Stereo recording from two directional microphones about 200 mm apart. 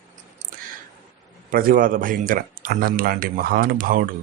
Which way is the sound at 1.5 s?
45° right (ahead or behind).